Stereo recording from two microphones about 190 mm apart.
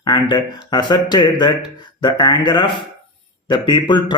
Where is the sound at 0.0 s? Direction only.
25° left (ahead or behind).